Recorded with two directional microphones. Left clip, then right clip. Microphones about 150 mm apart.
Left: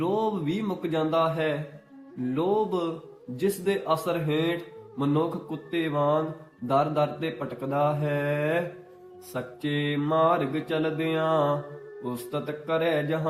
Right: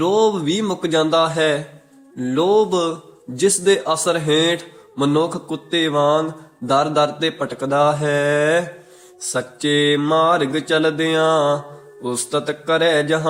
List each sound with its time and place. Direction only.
0.0 s speech: 30° right (ahead or behind)